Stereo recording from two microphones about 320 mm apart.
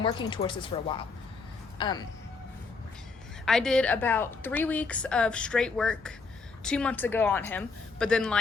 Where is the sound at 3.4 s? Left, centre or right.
Centre.